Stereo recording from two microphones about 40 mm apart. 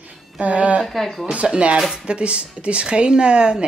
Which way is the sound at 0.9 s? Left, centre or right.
Centre.